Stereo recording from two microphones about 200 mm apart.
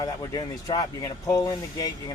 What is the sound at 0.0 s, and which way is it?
Speech, 20° left (ahead or behind).